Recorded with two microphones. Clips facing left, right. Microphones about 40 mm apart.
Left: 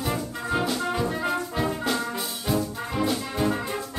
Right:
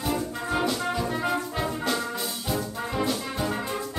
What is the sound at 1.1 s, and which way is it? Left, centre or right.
Brass instrument, centre.